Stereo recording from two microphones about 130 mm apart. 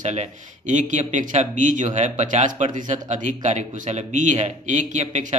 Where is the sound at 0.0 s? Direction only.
65° right (ahead or behind).